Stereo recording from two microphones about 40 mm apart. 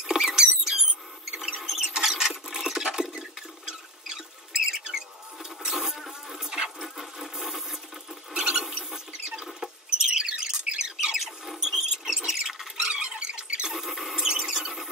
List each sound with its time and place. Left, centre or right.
0.0 s rodents: centre
1.7 s a sound: centre
4.6 s rodents: centre
6.5 s a sound: centre
7.0 s wood: centre
8.3 s mechanisms: centre
8.9 s rodents: centre
11.0 s rodents: centre
12.8 s a sound: right
13.7 s rodents: centre
14.2 s rodents: centre
14.5 s squeal: centre